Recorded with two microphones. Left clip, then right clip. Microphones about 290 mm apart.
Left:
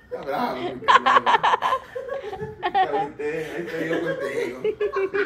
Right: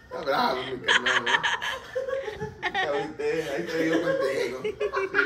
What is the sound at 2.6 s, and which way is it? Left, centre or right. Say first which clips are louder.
Music: left 6 dB; centre.